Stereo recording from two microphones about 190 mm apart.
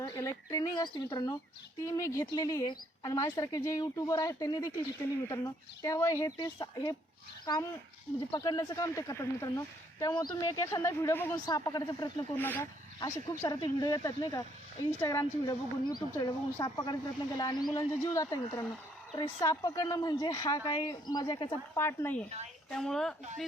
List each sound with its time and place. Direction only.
0.0 s a woman's voice: 15° left (ahead or behind)
12.4 s a woman's voice: 10° left (ahead or behind)